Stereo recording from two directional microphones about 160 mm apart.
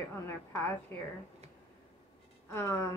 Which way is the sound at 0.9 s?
15° left (ahead or behind).